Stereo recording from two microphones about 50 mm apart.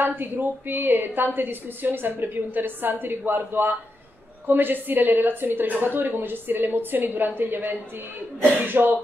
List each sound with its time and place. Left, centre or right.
0.0 s a woman's voice: right